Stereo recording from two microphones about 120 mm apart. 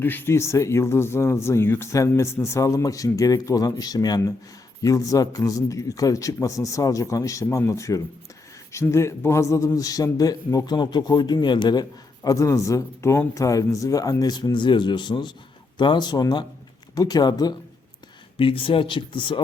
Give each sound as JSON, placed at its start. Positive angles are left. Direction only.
{"t": 0.0, "sound": "a man's voice", "side_deg": 15}
{"t": 18.3, "sound": "speech", "side_deg": 50}